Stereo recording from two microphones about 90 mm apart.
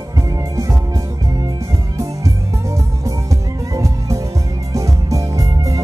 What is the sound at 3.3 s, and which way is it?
Music, 40° right (ahead or behind).